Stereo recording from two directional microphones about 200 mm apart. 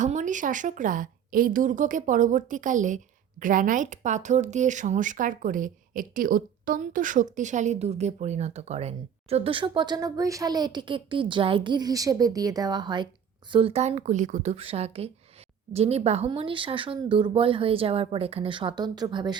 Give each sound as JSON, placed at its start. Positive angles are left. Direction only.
{"t": 0.0, "sound": "speech", "side_deg": -40}